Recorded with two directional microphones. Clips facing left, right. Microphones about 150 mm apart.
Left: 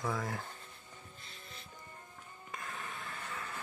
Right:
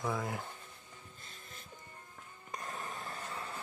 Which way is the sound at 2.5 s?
40° right (ahead or behind).